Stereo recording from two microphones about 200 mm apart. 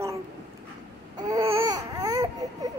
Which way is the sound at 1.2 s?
15° right (ahead or behind).